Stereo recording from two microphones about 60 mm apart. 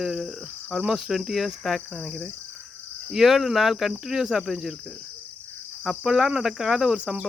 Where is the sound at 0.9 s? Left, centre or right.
Centre.